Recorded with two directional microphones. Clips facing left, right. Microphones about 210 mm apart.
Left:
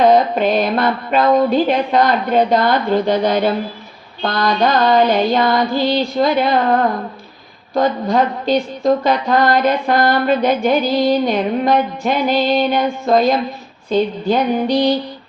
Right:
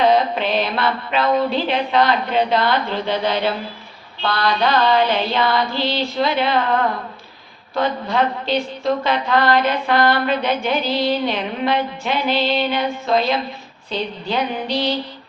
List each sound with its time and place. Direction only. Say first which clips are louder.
0.0 s speech: left 4 dB; 45° left (ahead or behind)